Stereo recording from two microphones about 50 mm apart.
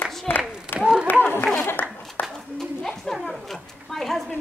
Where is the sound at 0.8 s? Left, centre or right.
Centre.